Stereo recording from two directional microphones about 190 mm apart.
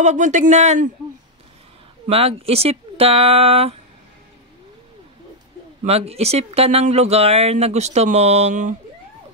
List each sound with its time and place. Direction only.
0.0 s speech: 40° right (ahead or behind)
2.0 s speech: 30° right (ahead or behind)
5.9 s speech: 35° right (ahead or behind)